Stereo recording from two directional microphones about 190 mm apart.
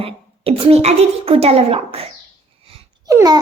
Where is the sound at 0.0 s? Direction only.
30° right (ahead or behind).